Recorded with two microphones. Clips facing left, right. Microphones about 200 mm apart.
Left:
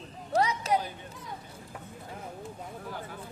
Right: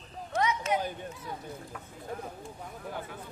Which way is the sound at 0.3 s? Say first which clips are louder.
Left 2 dB; 35° left (ahead or behind).